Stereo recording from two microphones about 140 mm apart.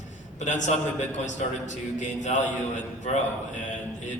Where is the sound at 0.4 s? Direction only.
60° left (ahead or behind).